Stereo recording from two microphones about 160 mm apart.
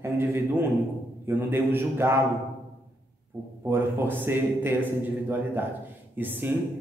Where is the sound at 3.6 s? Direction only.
15° right (ahead or behind).